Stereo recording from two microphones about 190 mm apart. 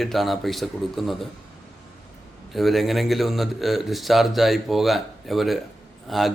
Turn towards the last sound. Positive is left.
turn(degrees=0)  # may be behind; listen again after turning